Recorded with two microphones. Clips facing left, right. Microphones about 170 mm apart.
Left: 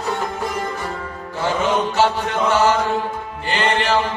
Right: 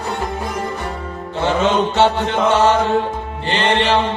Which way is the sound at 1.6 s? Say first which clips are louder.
Right 3 dB; 25° right (ahead or behind).